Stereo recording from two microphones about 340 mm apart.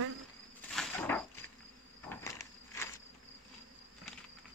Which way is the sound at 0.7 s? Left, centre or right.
Centre.